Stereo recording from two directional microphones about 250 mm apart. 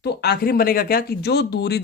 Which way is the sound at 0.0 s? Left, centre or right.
Left.